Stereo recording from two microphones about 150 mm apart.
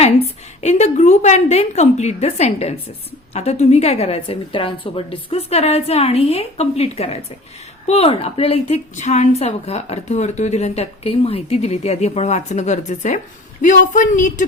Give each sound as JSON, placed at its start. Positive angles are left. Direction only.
{"t": 0.0, "sound": "a woman's voice", "side_deg": 45}